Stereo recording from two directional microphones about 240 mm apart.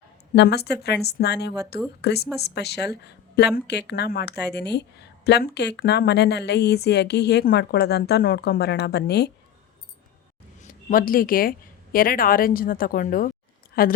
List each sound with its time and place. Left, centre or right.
0.3 s a woman's voice: left
10.6 s a woman's voice: left